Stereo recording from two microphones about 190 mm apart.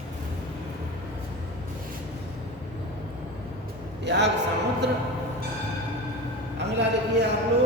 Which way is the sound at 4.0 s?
65° right (ahead or behind).